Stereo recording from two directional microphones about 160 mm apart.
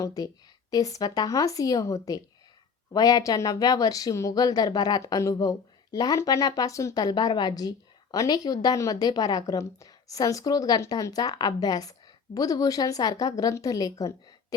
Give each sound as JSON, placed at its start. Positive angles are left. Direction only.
{"t": 0.0, "sound": "speech", "side_deg": 20}